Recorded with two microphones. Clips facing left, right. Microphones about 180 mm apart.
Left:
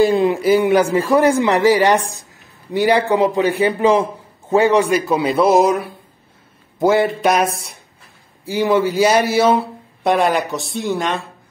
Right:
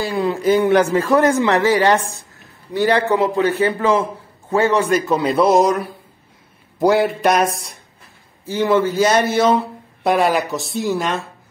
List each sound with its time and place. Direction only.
0.0 s a sound: 20° left (ahead or behind)
0.4 s a man's voice: 10° left (ahead or behind)
8.5 s a man's voice: 10° left (ahead or behind)
10.0 s a woman's voice: centre (ahead or behind)